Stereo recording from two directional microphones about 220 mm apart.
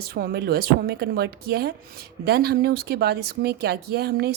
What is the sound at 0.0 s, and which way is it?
A woman's voice, 45° right (ahead or behind).